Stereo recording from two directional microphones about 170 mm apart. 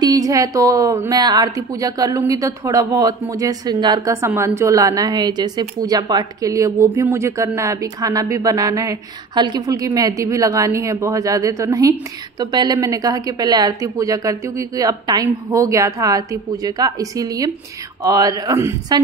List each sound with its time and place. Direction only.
0.0 s a woman's voice: 20° right (ahead or behind)